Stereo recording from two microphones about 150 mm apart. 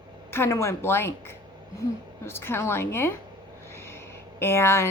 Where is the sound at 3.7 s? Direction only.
15° left (ahead or behind).